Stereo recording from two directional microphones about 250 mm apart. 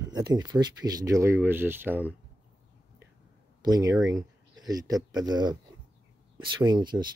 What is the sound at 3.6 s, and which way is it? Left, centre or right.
Speech, centre.